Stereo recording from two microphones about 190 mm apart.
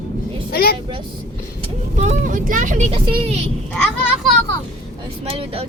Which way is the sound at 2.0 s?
40° right (ahead or behind).